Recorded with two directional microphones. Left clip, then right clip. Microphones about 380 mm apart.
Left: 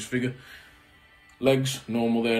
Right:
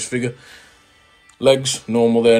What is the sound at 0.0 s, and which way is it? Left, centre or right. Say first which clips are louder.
Speech: right 6 dB; centre.